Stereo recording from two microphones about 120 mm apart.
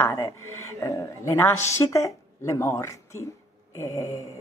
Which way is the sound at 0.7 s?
25° left (ahead or behind).